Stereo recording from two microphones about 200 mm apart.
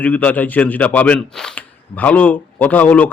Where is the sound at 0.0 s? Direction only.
10° left (ahead or behind).